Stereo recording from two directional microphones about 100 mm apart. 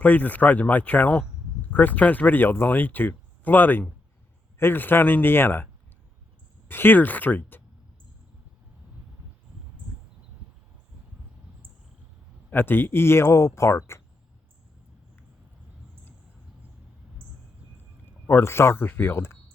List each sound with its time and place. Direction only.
0.0 s speech: 15° left (ahead or behind)
6.7 s speech: 20° left (ahead or behind)
12.5 s speech: 20° left (ahead or behind)
18.3 s speech: 25° left (ahead or behind)